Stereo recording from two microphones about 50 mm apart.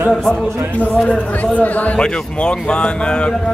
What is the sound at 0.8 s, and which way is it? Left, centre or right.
A man's voice, left.